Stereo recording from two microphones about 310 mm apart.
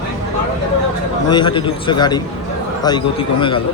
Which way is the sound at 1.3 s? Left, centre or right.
Centre.